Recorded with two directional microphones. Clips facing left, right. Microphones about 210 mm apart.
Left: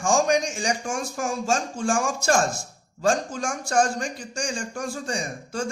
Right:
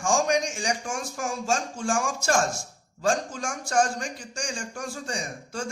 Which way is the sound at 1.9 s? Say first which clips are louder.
Left 3 dB; 35° left (ahead or behind).